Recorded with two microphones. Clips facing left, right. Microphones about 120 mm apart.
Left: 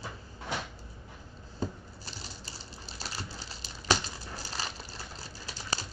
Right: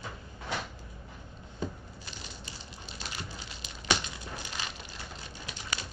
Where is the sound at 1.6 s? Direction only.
35° left (ahead or behind).